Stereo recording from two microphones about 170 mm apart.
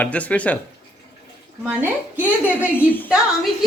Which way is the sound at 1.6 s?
10° right (ahead or behind).